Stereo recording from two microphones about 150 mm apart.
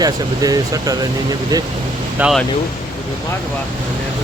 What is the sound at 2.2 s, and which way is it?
Speech, 10° right (ahead or behind).